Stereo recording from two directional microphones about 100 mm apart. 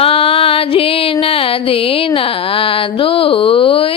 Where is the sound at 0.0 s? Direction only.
70° left (ahead or behind).